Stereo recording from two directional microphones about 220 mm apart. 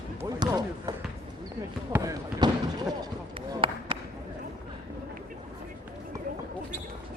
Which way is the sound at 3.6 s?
25° right (ahead or behind).